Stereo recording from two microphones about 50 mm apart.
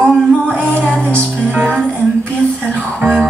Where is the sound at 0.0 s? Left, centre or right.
Left.